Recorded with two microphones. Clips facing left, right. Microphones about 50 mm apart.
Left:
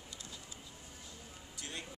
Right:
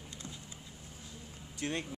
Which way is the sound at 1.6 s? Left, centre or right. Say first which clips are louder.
Right 11 dB; right.